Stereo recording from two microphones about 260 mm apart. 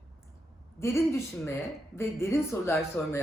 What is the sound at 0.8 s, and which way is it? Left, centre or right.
Speech, centre.